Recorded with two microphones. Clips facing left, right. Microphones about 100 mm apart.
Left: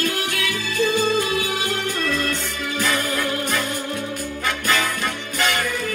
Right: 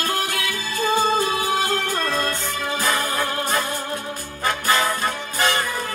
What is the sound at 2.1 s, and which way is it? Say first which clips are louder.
Music: right 1 dB; 40° right (ahead or behind).